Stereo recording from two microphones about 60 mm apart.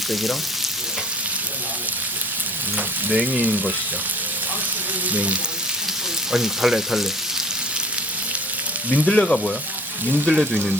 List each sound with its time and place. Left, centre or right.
0.1 s frying: centre
2.7 s speech: right
5.1 s speech: right
6.3 s frying: centre
9.0 s speech: centre
10.2 s frying: centre